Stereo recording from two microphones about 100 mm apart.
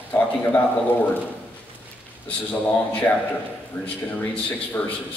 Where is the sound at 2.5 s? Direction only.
15° left (ahead or behind).